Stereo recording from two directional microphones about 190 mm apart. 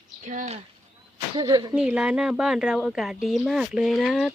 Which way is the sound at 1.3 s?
20° right (ahead or behind).